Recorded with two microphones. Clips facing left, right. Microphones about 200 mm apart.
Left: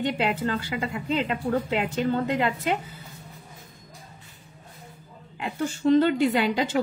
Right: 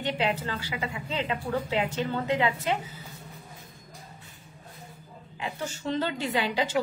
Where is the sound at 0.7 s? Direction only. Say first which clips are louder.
Left 6 dB; 50° left (ahead or behind).